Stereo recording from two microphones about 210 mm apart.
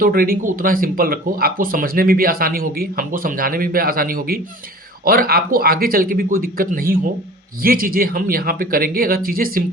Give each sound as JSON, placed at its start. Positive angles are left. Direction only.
{"t": 0.0, "sound": "speech", "side_deg": -45}